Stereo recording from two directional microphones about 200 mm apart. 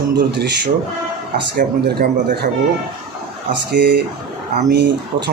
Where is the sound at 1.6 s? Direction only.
45° right (ahead or behind).